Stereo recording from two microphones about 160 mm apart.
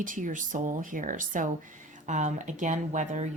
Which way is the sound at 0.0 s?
55° right (ahead or behind).